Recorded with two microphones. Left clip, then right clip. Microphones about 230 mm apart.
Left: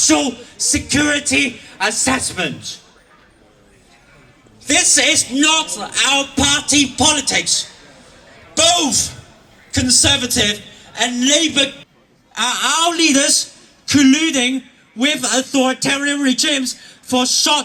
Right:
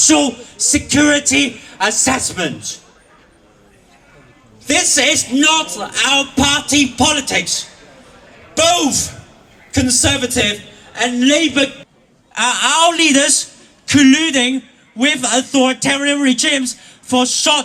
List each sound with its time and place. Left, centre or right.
0.0 s a man's voice: right
4.6 s a man's voice: right
8.5 s a man's voice: right
12.3 s a man's voice: right
16.2 s a man's voice: right
17.2 s speech: right